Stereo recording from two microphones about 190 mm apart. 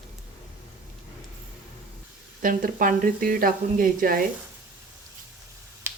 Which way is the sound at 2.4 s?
45° right (ahead or behind).